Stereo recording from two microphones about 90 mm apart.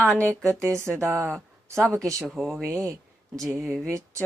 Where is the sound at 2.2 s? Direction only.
Centre (ahead or behind).